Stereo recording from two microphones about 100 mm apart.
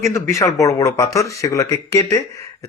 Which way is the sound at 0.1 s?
30° left (ahead or behind).